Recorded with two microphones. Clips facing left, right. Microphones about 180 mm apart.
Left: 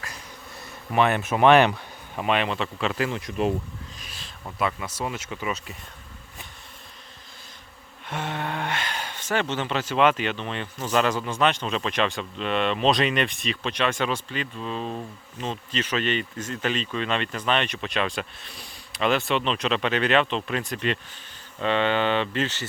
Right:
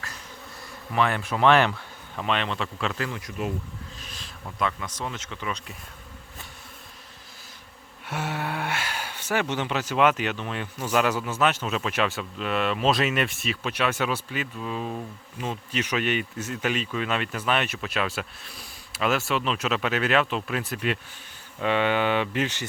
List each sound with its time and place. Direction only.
0.9 s speech: 20° left (ahead or behind); by 2.9 s 5° left (ahead or behind)
3.0 s speech: 25° left (ahead or behind)
4.0 s speech: 10° left (ahead or behind)
8.0 s speech: 5° right (ahead or behind)